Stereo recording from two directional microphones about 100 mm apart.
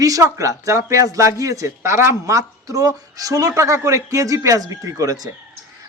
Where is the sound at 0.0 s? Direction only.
35° right (ahead or behind).